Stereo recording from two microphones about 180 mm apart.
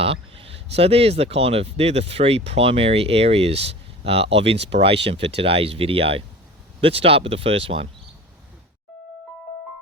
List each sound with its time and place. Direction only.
0.0 s speech: 30° right (ahead or behind)